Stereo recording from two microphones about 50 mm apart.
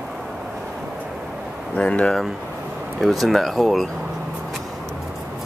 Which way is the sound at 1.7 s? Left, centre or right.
Left.